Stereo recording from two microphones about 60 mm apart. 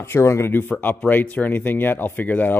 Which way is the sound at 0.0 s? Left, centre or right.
Left.